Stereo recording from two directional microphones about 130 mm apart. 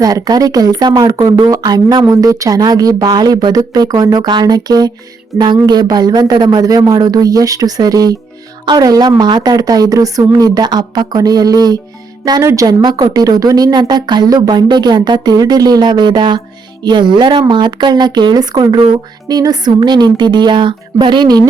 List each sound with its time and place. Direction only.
0.0 s a woman's voice: 30° right (ahead or behind)